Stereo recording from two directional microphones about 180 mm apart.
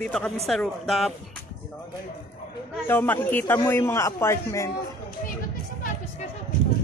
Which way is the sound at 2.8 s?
10° left (ahead or behind).